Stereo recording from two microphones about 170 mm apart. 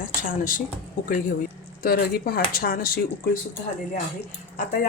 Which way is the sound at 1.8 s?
60° left (ahead or behind).